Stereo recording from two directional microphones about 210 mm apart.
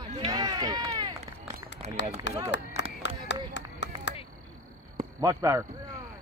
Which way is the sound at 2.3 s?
60° left (ahead or behind).